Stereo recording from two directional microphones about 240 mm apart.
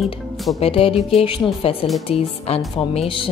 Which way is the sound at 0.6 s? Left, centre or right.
Left.